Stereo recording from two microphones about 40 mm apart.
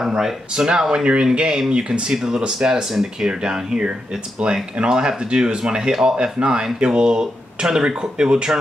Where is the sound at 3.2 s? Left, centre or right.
Right.